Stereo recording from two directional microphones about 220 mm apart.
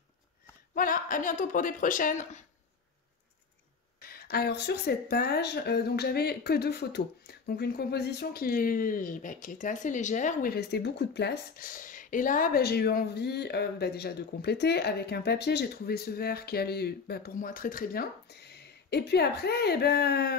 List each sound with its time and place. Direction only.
0.7 s speech: 40° left (ahead or behind)
4.0 s speech: 45° left (ahead or behind)